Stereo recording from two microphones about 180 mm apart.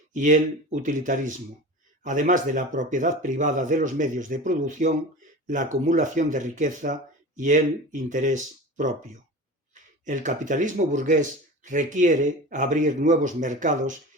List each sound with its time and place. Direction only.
0.1 s speech: 45° right (ahead or behind)